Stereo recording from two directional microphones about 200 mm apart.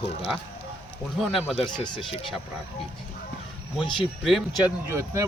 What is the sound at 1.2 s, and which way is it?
Speech, centre (ahead or behind).